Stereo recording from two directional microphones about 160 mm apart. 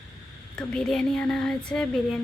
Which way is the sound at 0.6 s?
5° left (ahead or behind).